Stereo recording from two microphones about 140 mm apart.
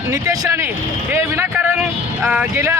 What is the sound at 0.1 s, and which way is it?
A man's voice, 20° right (ahead or behind).